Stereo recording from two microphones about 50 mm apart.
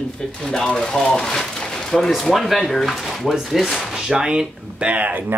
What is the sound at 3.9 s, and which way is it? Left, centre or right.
Speech, centre.